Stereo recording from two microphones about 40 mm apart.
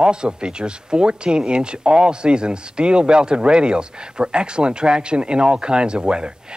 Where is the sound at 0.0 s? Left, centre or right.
Right.